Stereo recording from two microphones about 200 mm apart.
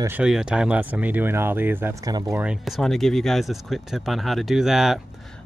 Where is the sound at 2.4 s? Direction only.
Centre (ahead or behind).